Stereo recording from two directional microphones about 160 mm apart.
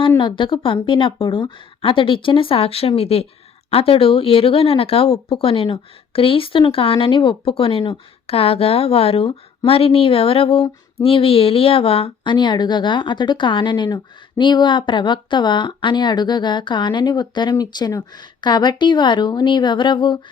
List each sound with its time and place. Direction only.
0.2 s speech: 30° left (ahead or behind)